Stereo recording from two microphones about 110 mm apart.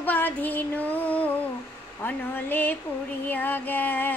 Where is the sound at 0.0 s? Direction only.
15° left (ahead or behind).